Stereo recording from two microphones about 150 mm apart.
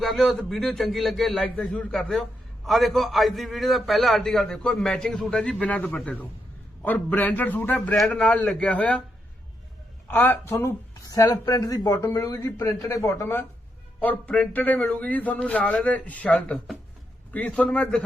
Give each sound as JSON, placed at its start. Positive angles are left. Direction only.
{"t": 0.0, "sound": "a man's voice", "side_deg": 0}
{"t": 10.1, "sound": "a woman's voice", "side_deg": 15}